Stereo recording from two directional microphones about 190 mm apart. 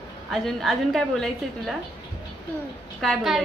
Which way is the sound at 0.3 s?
Centre (ahead or behind).